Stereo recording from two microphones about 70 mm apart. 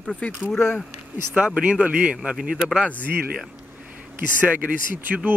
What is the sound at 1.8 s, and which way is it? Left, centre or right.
Speech, centre.